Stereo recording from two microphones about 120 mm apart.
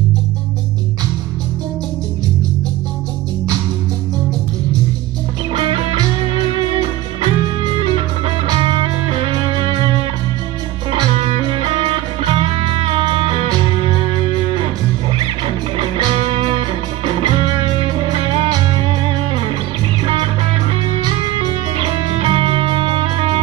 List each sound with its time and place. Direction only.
5.5 s music: 45° right (ahead or behind)
11.1 s music: 55° right (ahead or behind)
21.7 s music: 45° right (ahead or behind)